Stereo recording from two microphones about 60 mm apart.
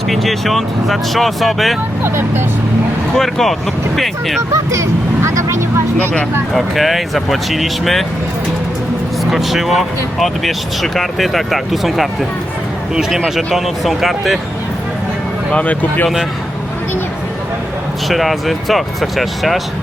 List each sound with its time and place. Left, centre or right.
0.1 s speech: centre
3.2 s speech: centre
4.5 s music: right
6.5 s speech: centre
9.3 s speech: centre
15.5 s speech: left
18.1 s speech: centre